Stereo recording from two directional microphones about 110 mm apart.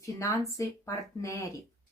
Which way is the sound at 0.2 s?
30° left (ahead or behind).